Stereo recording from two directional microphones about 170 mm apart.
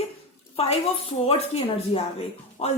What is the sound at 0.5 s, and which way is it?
A woman's voice, 35° left (ahead or behind).